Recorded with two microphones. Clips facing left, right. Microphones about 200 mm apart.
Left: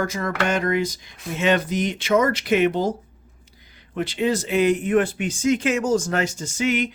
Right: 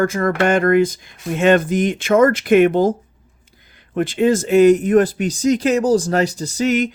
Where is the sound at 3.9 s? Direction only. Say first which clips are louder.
Right 6 dB; 50° right (ahead or behind).